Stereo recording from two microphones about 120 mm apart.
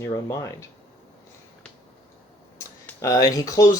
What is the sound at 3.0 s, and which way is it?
Speech, 25° left (ahead or behind).